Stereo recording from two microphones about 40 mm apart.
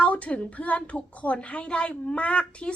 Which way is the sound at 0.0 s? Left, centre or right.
Left.